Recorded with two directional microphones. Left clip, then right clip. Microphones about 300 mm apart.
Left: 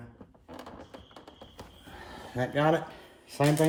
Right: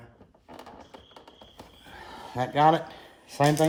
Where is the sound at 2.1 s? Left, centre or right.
Right.